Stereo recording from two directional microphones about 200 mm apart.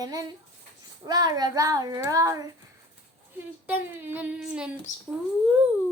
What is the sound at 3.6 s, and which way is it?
Speech, 10° right (ahead or behind).